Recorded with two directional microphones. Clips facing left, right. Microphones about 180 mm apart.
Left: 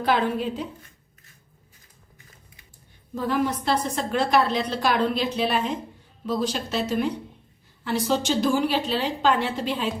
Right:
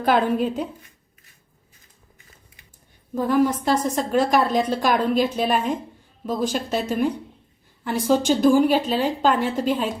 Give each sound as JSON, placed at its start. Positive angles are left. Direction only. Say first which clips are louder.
{"t": 0.0, "sound": "a woman's voice", "louder": "right 4 dB", "side_deg": -45}
{"t": 3.2, "sound": "a woman's voice", "louder": "right 5 dB", "side_deg": -45}